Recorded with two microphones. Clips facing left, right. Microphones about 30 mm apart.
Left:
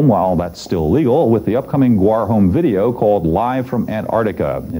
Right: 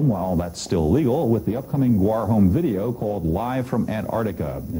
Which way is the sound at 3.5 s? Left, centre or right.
Centre.